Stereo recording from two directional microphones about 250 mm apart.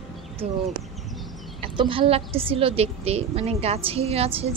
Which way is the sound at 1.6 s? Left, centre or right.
Right.